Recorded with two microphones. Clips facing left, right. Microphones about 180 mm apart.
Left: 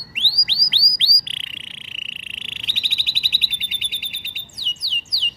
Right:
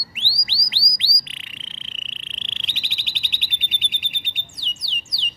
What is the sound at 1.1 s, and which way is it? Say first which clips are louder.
Frog: left 1 dB; 25° left (ahead or behind).